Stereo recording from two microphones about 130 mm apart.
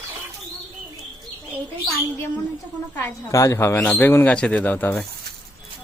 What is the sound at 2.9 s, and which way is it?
Speech, 20° left (ahead or behind).